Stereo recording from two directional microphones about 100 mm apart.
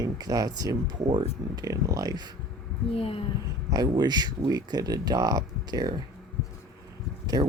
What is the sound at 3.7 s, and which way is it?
Speech, 40° right (ahead or behind).